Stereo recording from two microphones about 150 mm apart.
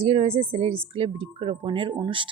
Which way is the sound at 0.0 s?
45° right (ahead or behind).